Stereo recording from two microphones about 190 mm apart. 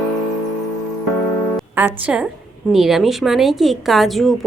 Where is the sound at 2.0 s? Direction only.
5° right (ahead or behind).